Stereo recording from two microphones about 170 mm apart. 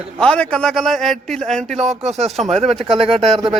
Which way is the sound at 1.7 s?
40° right (ahead or behind).